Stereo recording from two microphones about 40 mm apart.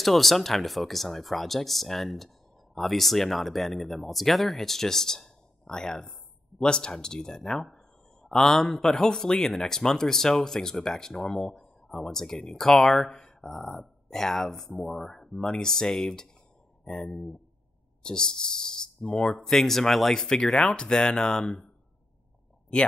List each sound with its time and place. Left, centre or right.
0.0 s speech: centre; by 19.3 s left
19.3 s speech: centre